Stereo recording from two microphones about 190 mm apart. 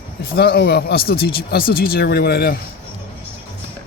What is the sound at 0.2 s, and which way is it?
Speech, 55° left (ahead or behind).